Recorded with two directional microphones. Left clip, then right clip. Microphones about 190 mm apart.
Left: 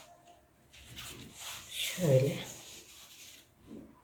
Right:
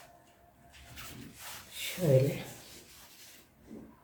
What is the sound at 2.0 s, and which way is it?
Speech, 20° left (ahead or behind).